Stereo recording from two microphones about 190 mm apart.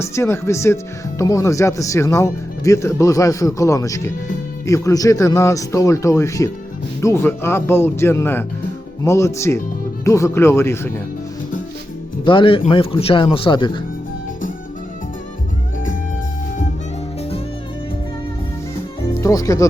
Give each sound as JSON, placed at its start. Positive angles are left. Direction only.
{"t": 0.0, "sound": "speech", "side_deg": 15}
{"t": 12.2, "sound": "speech", "side_deg": 25}
{"t": 19.1, "sound": "speech", "side_deg": 15}